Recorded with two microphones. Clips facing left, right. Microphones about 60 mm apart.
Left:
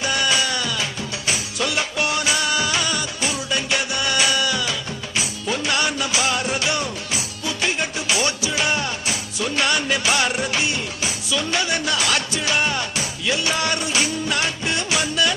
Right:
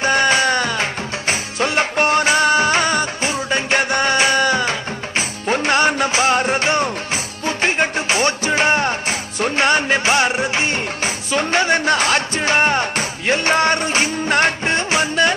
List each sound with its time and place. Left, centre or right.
0.0 s music: right
10.7 s music: right